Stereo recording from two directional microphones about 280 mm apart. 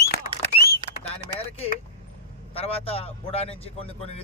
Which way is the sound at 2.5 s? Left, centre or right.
Left.